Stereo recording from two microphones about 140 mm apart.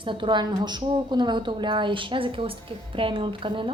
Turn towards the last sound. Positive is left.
turn(degrees=-35)  # may be behind; listen again after turning